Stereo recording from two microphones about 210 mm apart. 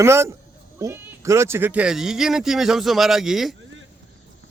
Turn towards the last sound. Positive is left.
turn(degrees=0)  # may be behind; listen again after turning